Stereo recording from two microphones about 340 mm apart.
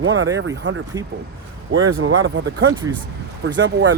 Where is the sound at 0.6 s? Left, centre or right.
Right.